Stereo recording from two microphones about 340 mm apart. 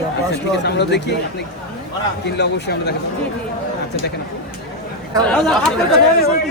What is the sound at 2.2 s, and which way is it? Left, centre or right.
Speech, left.